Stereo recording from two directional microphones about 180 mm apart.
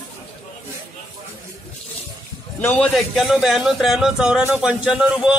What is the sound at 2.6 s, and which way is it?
A man's voice, 5° left (ahead or behind).